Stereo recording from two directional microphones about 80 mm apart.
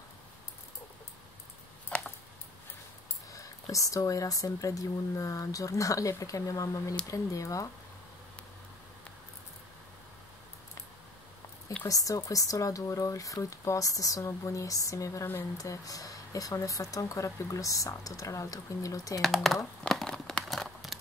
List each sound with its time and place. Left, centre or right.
3.3 s speech: left
11.9 s speech: left
19.2 s speech: centre
19.8 s crumpling: centre